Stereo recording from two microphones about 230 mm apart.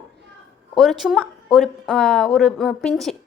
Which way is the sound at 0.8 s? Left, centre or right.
Centre.